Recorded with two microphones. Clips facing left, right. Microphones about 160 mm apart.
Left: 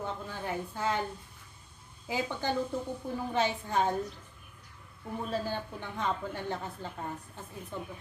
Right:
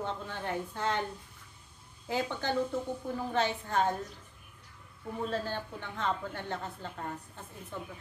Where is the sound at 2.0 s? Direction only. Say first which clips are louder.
Even; 10° left (ahead or behind).